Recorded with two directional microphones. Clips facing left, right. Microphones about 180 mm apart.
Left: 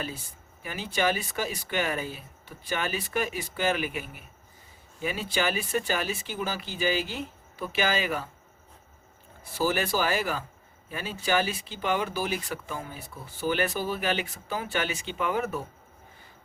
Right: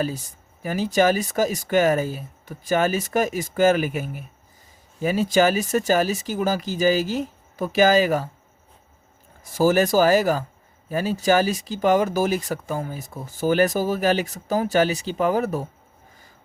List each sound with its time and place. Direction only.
0.0 s speech: 40° right (ahead or behind)
9.4 s speech: 45° right (ahead or behind)